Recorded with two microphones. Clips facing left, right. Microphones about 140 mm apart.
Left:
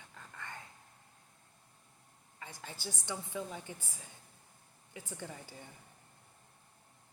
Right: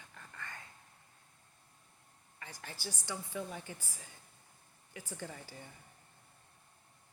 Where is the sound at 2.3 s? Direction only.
20° left (ahead or behind).